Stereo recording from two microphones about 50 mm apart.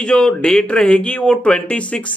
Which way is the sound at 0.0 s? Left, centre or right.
Centre.